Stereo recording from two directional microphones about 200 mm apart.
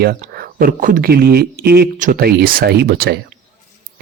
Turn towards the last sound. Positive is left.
turn(degrees=-50)  # may be behind; listen again after turning